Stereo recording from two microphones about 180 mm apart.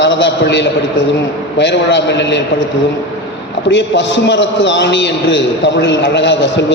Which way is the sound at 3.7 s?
80° left.